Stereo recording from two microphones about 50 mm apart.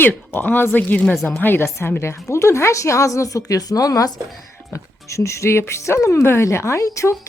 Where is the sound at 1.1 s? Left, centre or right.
Centre.